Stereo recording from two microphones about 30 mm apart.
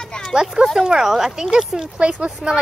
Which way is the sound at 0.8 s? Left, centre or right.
Centre.